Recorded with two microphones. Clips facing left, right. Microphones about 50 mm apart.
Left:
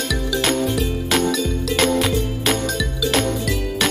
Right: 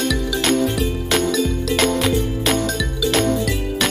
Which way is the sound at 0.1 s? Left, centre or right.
Centre.